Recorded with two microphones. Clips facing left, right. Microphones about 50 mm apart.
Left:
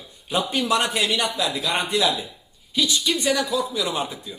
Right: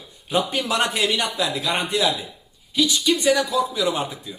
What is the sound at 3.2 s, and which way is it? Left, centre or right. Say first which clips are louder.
Speech: right 3 dB; right.